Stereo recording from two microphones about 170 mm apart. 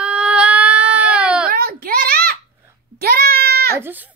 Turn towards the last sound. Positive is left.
turn(degrees=-65)  # may be behind; listen again after turning